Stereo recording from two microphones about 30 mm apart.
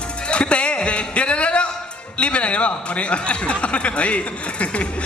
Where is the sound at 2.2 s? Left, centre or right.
Left.